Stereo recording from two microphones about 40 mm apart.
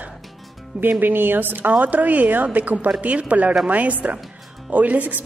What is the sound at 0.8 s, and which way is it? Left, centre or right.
Speech, right.